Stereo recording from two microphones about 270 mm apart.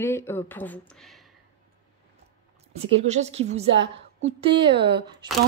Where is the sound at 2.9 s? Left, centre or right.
Right.